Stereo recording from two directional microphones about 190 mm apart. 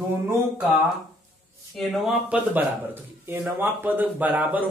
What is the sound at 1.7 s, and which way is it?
A man's voice, 5° right (ahead or behind).